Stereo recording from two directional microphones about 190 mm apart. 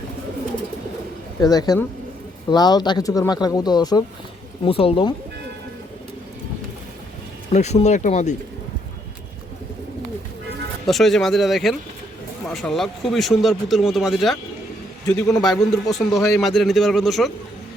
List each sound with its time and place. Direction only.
1.4 s speech: 20° left (ahead or behind)
7.5 s speech: 35° left (ahead or behind)
10.8 s a man's voice: centre (ahead or behind)
15.4 s a man's voice: centre (ahead or behind)